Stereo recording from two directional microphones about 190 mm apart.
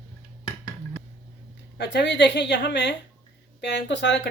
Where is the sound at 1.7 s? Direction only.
65° left (ahead or behind).